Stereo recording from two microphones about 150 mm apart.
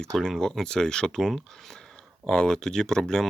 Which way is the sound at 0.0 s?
5° left (ahead or behind).